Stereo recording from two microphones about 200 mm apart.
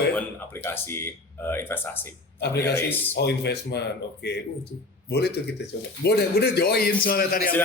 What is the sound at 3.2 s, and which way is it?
Speech, 55° left (ahead or behind).